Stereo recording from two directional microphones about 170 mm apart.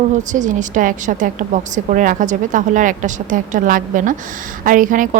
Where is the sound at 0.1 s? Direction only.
45° right (ahead or behind).